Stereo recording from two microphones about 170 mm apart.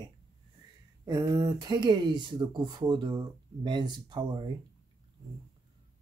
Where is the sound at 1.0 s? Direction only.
20° right (ahead or behind).